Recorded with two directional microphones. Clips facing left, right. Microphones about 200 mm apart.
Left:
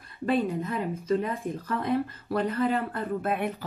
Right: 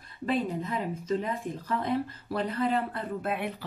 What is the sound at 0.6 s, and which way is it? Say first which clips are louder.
A woman's voice: left 2 dB; 55° left (ahead or behind).